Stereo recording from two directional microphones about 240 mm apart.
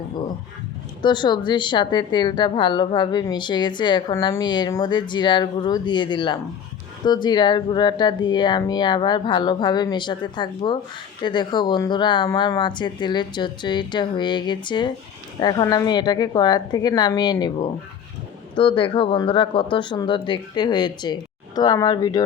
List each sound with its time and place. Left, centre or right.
1.0 s speech: centre